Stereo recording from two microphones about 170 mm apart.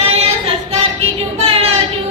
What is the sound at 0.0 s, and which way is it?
Singing, 35° right (ahead or behind).